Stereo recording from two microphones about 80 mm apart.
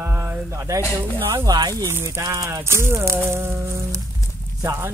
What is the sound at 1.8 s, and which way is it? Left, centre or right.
Music, right.